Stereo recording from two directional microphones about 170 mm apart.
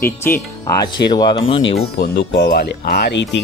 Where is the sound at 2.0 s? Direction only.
80° left.